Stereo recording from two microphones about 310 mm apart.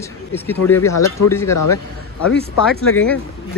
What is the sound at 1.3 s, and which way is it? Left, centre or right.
Speech, centre.